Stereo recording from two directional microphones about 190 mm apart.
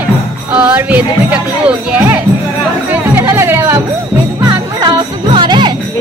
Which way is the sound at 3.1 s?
15° right (ahead or behind).